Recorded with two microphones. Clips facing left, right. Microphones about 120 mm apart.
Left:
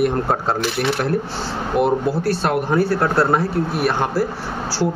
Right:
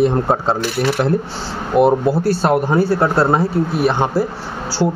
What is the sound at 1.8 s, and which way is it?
Speech, 35° right (ahead or behind).